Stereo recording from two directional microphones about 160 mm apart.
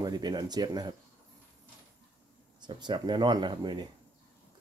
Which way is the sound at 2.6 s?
30° right (ahead or behind).